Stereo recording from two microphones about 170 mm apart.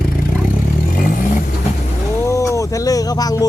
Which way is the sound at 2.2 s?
15° left (ahead or behind).